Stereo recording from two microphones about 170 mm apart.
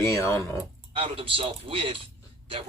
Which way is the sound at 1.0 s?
30° right (ahead or behind).